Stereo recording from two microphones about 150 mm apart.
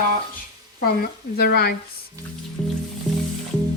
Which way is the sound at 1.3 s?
90° left.